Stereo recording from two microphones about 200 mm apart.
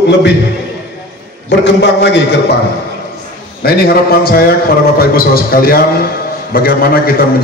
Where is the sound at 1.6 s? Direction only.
60° left (ahead or behind).